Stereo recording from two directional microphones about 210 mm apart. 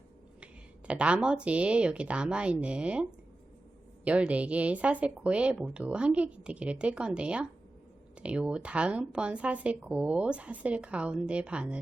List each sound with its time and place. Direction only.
0.9 s speech: 5° right (ahead or behind)